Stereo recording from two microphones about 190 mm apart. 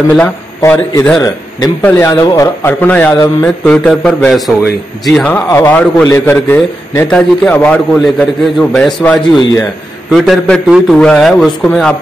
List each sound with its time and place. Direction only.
0.6 s a man's voice: 15° left (ahead or behind)